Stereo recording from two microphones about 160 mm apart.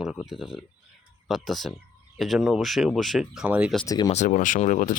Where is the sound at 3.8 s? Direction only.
25° left (ahead or behind).